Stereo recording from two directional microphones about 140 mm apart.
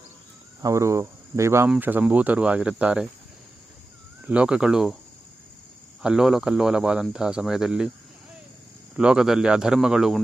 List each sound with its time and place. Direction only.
0.6 s speech: 20° right (ahead or behind)
4.3 s speech: 5° right (ahead or behind)
6.0 s speech: 5° right (ahead or behind)
9.0 s speech: 5° right (ahead or behind)